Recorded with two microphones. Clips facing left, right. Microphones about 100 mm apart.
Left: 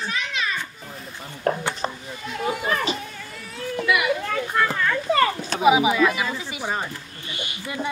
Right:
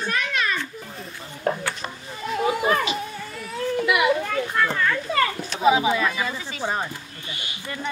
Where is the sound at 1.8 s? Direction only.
30° left (ahead or behind).